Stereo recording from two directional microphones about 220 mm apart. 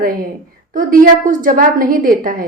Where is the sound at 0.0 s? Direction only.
40° right (ahead or behind).